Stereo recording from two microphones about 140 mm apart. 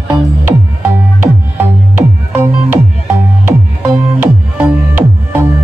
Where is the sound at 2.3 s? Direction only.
15° right (ahead or behind).